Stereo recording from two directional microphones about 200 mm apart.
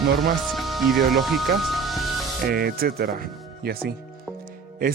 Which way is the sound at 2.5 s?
50° right (ahead or behind).